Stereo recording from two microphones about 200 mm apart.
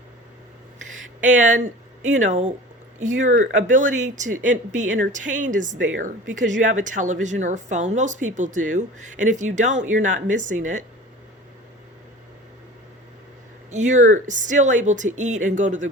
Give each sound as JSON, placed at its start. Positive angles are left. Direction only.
{"t": 1.2, "sound": "a woman's voice", "side_deg": -40}
{"t": 13.7, "sound": "a woman's voice", "side_deg": -35}